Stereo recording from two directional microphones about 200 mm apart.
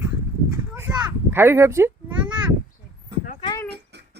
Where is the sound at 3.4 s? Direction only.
20° left (ahead or behind).